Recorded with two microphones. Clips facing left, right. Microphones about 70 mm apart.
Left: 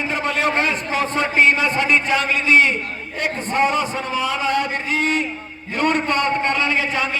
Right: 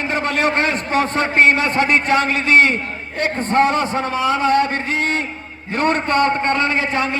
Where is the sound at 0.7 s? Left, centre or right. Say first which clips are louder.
Right 3 dB; right.